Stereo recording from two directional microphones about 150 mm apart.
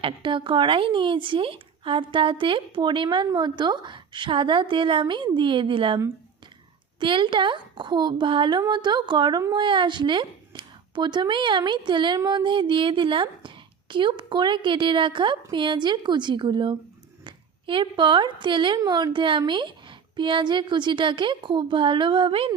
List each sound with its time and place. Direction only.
0.0 s a woman's voice: 35° right (ahead or behind)
7.0 s a woman's voice: 35° right (ahead or behind)